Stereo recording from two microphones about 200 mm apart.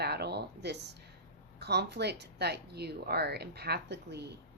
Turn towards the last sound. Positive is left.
turn(degrees=-55)  # may be behind; listen again after turning